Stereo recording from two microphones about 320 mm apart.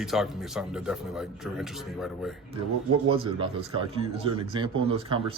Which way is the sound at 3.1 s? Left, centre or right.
Centre.